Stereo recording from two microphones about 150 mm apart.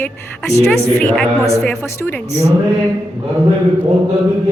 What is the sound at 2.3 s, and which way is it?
Speech, 20° left (ahead or behind).